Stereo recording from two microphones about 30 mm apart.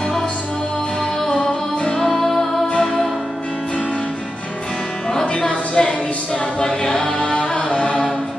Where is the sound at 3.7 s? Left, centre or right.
Left.